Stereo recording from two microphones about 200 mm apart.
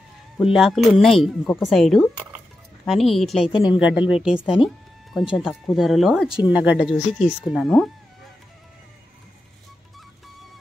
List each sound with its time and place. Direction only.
0.5 s speech: centre (ahead or behind)
3.5 s speech: 25° left (ahead or behind)
4.1 s speech: 5° right (ahead or behind)